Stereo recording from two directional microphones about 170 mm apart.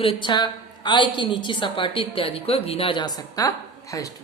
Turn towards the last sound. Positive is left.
turn(degrees=20)  # may be behind; listen again after turning